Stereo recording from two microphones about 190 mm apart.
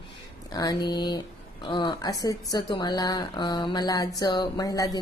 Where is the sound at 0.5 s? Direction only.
20° left (ahead or behind).